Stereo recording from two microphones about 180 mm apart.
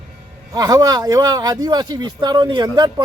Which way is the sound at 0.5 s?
20° right (ahead or behind).